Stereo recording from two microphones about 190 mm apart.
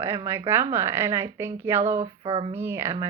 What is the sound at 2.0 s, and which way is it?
Child singing, 30° right (ahead or behind).